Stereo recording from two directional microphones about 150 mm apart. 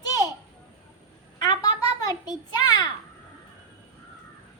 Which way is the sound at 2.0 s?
25° left (ahead or behind).